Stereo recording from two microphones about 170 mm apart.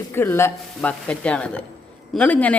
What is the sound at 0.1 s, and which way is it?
Speech, 15° left (ahead or behind).